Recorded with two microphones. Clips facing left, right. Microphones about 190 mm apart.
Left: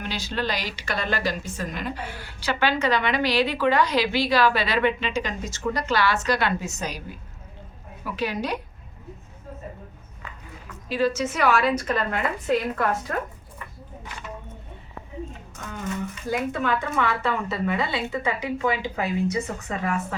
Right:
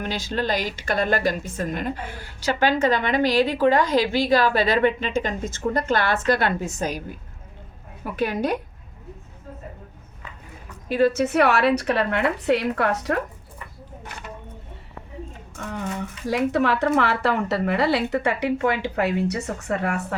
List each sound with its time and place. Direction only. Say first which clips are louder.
0.0 s a woman's voice: right 3 dB; 45° right (ahead or behind)
10.8 s speech: right 4 dB; 55° right (ahead or behind); by 13.2 s 75° right (ahead or behind)
16.2 s speech: right 6 dB; 70° right (ahead or behind)